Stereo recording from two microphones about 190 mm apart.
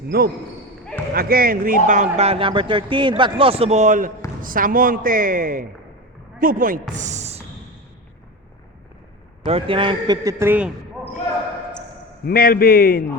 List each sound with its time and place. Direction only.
0.1 s a man's voice: 55° right (ahead or behind); by 7.4 s 35° right (ahead or behind)
9.5 s a man's voice: 30° right (ahead or behind); by 10.7 s 10° right (ahead or behind)
12.2 s a man's voice: 50° left (ahead or behind)